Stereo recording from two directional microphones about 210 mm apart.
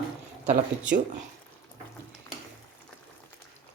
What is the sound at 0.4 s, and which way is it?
Speech, 40° right (ahead or behind).